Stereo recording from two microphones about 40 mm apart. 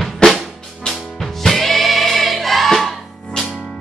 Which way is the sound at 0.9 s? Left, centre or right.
Centre.